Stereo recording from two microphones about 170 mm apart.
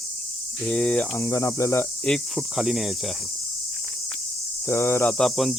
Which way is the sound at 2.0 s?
Centre (ahead or behind).